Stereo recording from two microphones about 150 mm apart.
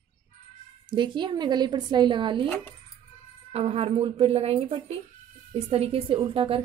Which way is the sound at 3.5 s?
40° right (ahead or behind).